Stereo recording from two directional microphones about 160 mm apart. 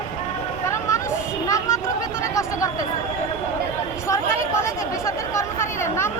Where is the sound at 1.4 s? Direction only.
20° left (ahead or behind).